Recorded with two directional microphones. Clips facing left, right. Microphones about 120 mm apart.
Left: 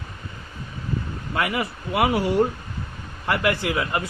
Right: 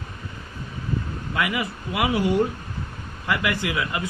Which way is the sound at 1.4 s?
30° left (ahead or behind).